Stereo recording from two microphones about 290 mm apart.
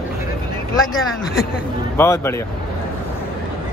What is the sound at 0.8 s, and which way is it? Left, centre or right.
Speech, centre.